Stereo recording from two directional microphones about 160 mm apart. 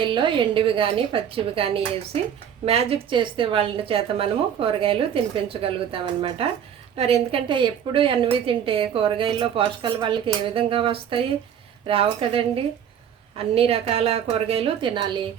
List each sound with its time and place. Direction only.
0.0 s a woman's voice: 30° right (ahead or behind)